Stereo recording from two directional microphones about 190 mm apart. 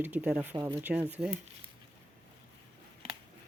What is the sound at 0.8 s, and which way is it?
Speech, 10° right (ahead or behind).